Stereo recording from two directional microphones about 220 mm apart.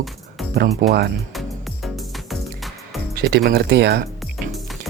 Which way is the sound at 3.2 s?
45° right (ahead or behind).